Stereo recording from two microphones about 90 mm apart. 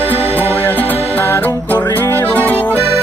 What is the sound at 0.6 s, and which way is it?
Music, 20° left (ahead or behind).